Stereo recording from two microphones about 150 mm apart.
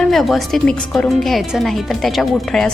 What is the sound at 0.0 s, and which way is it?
A woman's voice, centre (ahead or behind).